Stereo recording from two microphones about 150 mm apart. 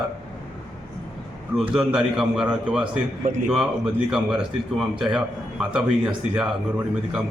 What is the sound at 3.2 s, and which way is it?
Speech, 60° right (ahead or behind).